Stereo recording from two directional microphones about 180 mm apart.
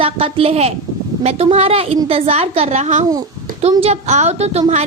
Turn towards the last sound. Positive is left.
turn(degrees=-35)  # may be behind; listen again after turning